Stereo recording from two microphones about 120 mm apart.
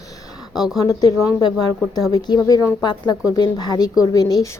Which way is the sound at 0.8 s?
30° left (ahead or behind).